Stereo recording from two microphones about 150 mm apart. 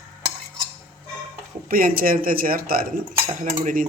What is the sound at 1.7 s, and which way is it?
Speech, 75° right (ahead or behind).